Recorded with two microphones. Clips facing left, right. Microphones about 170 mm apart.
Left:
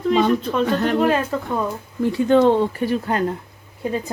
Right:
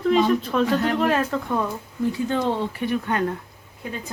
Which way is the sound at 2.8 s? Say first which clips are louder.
Left 3 dB; 30° left (ahead or behind).